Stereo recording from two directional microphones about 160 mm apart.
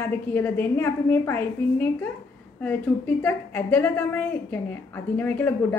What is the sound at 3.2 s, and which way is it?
A woman's voice, 10° left (ahead or behind).